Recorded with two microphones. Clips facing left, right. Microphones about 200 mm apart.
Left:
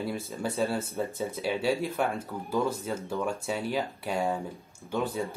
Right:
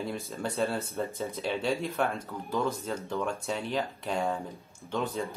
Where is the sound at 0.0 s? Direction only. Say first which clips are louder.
Left 2 dB; 5° left (ahead or behind).